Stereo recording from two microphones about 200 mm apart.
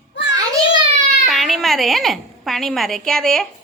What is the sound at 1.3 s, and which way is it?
A woman's voice, centre (ahead or behind).